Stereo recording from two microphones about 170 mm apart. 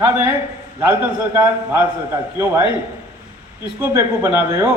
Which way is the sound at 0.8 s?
15° right (ahead or behind).